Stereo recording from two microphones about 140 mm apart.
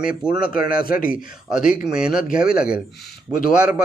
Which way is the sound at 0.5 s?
90° left.